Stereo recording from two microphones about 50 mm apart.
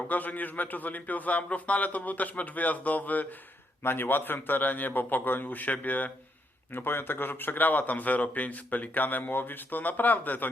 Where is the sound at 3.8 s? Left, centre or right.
Left.